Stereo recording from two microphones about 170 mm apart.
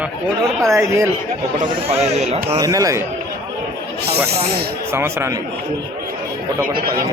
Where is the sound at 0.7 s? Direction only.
15° right (ahead or behind).